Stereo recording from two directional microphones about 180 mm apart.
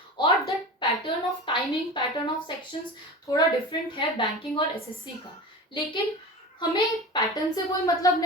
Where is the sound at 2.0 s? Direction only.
25° left (ahead or behind).